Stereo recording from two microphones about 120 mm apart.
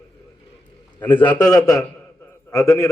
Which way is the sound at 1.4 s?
30° left (ahead or behind).